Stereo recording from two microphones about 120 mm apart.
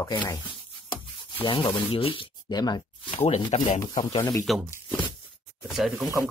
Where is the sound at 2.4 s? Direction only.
35° left (ahead or behind).